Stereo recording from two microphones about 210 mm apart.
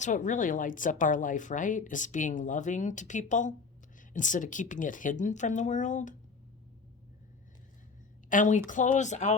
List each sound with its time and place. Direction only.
0.0 s speech: 35° left (ahead or behind)
8.3 s speech: 35° left (ahead or behind)